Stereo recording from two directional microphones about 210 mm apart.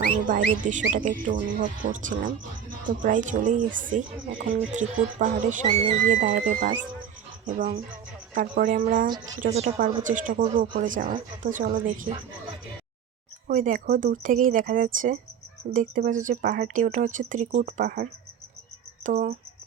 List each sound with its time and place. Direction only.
0.3 s speech: 40° right (ahead or behind)
13.5 s speech: 40° right (ahead or behind)